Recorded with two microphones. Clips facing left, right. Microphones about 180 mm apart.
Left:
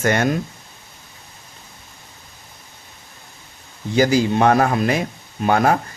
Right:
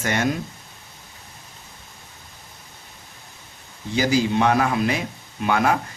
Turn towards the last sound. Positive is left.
turn(degrees=40)  # may be behind; listen again after turning